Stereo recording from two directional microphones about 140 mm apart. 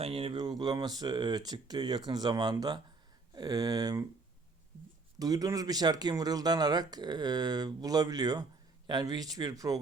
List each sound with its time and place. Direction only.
0.0 s speech: 40° right (ahead or behind)
5.2 s speech: 25° right (ahead or behind)